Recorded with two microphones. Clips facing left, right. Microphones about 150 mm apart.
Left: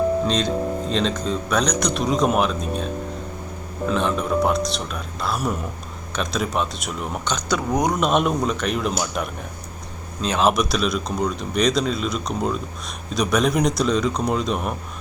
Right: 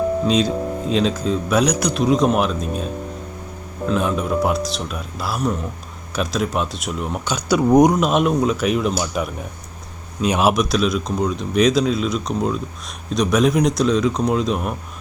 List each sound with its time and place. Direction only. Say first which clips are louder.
0.3 s speech: right 3 dB; 5° right (ahead or behind)
7.7 s speech: right 10 dB; 20° right (ahead or behind)
7.9 s speech: right 3 dB; centre (ahead or behind)
10.5 s speech: right 3 dB; centre (ahead or behind)